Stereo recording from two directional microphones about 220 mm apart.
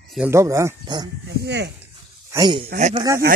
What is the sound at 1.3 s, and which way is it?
Speech, 50° right (ahead or behind).